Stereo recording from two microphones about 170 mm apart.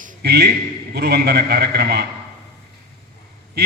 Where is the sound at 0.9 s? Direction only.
65° right (ahead or behind).